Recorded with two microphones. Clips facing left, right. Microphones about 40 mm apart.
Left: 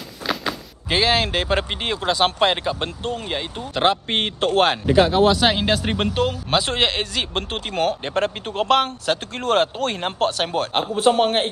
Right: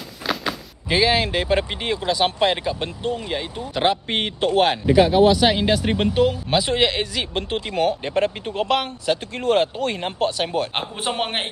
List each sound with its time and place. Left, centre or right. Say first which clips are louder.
0.3 s door: even; centre
1.0 s speech: even; left
3.7 s speech: left 1 dB; centre
4.4 s speech: even; left
4.9 s speech: right 2 dB; centre
5.9 s speech: right 3 dB; left
6.8 s speech: right 1 dB; centre
7.3 s speech: right 3 dB; left
10.7 s a man's voice: left 8 dB; centre